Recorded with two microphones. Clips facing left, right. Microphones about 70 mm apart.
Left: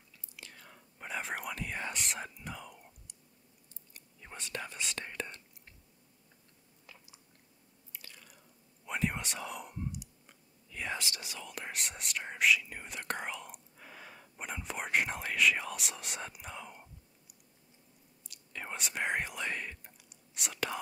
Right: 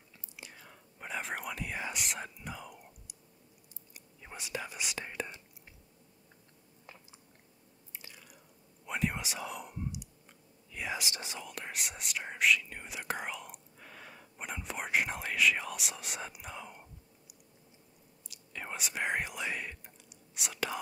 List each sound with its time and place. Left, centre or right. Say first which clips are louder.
0.4 s whispering: right 1 dB; centre
0.7 s whispering: even; centre
8.1 s drip: right 1 dB; centre
8.8 s whispering: even; centre
11.0 s speech: right 2 dB; right
11.4 s speech: even; centre
18.3 s whispering: even; centre